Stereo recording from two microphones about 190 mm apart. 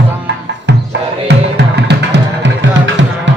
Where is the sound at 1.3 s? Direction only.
60° right (ahead or behind).